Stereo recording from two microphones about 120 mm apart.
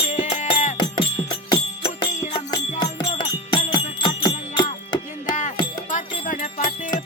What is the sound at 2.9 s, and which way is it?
Music, 45° left (ahead or behind).